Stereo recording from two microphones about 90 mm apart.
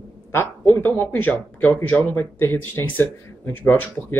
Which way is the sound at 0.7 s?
20° left (ahead or behind).